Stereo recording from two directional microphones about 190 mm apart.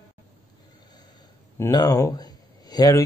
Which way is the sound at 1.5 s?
15° left (ahead or behind).